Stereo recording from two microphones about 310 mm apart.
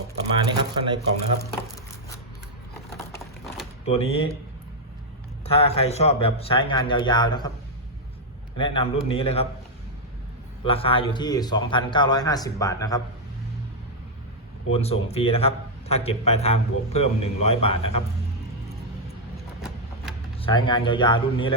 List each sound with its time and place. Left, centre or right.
0.5 s a sound: centre
3.8 s a man's voice: centre
5.5 s a man's voice: centre
8.5 s a man's voice: centre
10.6 s a man's voice: centre
14.7 s a man's voice: centre
20.4 s a man's voice: centre